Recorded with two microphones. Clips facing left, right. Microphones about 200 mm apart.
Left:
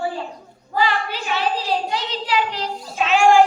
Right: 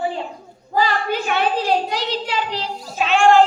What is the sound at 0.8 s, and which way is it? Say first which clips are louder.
A child's voice: right 2 dB; 45° right (ahead or behind).